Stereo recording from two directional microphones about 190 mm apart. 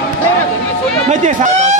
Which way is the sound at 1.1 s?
40° right (ahead or behind).